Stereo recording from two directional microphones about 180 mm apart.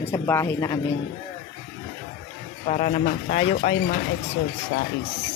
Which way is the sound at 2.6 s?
45° left (ahead or behind).